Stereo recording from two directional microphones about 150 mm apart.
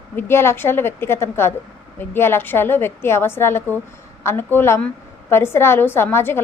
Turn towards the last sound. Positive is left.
turn(degrees=15)  # may be behind; listen again after turning